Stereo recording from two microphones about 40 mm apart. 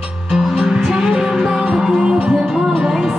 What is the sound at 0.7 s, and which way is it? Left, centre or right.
Music, centre.